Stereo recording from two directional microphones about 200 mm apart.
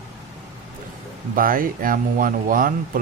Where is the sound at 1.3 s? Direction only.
45° right (ahead or behind).